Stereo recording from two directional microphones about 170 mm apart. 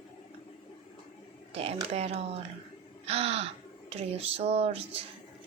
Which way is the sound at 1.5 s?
35° right (ahead or behind).